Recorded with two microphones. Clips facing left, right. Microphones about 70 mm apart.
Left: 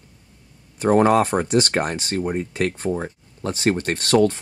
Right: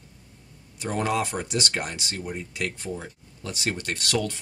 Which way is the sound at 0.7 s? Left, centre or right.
Left.